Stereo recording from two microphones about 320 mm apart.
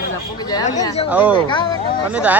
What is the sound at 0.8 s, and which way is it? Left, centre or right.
Speech, centre.